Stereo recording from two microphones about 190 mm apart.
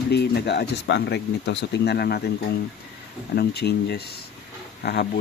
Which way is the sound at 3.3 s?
60° left (ahead or behind).